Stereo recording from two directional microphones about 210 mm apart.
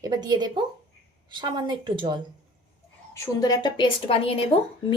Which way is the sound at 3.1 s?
15° left (ahead or behind).